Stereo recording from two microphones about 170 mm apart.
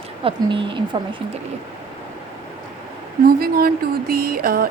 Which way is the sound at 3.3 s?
60° right (ahead or behind).